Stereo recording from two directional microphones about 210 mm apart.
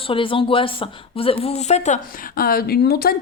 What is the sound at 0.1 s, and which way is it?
Speech, 25° left (ahead or behind).